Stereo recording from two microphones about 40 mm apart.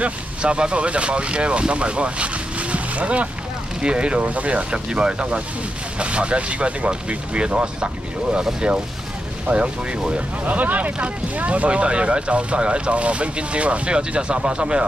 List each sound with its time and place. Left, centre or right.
0.0 s speech: right
10.4 s speech: right